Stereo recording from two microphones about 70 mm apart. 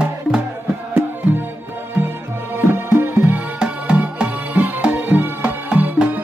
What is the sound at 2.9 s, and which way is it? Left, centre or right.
Music, centre.